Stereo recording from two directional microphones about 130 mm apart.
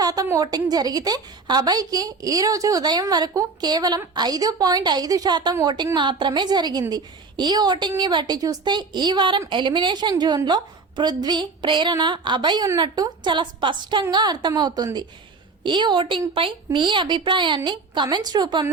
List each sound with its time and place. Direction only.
0.0 s a woman's voice: 30° right (ahead or behind)